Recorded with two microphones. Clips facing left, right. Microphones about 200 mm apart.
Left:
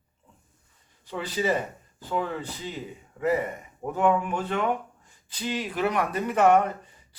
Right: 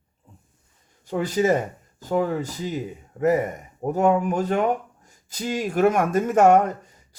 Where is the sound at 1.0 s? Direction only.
45° right (ahead or behind).